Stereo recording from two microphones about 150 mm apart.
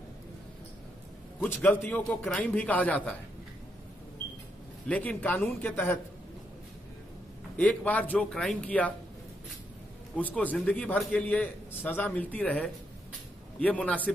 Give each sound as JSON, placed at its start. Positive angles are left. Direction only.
{"t": 1.4, "sound": "a man's voice", "side_deg": 10}
{"t": 4.8, "sound": "a man's voice", "side_deg": 10}
{"t": 7.5, "sound": "a man's voice", "side_deg": 10}
{"t": 10.1, "sound": "a man's voice", "side_deg": 10}